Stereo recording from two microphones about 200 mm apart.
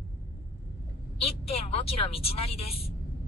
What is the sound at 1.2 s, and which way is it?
Speech, 30° left (ahead or behind).